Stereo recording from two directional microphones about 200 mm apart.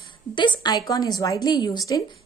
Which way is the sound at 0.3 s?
25° left (ahead or behind).